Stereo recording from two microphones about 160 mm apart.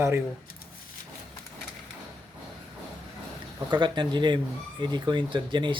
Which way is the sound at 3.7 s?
30° right (ahead or behind).